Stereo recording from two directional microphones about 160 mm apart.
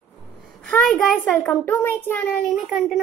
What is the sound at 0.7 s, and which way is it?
A child's voice, centre (ahead or behind).